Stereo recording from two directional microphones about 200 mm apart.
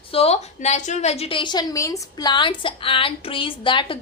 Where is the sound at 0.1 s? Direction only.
30° left (ahead or behind).